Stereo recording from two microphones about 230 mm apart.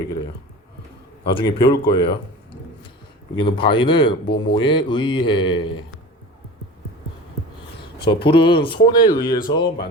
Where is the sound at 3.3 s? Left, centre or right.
Left.